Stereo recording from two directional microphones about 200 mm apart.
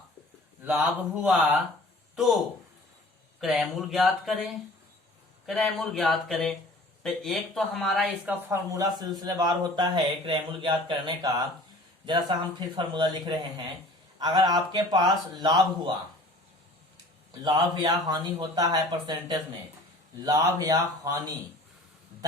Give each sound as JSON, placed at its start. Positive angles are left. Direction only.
{"t": 0.6, "sound": "speech", "side_deg": -5}
{"t": 3.4, "sound": "speech", "side_deg": 0}
{"t": 8.4, "sound": "speech", "side_deg": -15}
{"t": 17.4, "sound": "speech", "side_deg": -20}